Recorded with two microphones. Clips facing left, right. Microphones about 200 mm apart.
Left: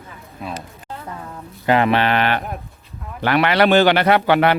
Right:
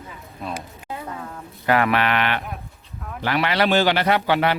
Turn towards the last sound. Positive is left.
turn(degrees=60)  # may be behind; listen again after turning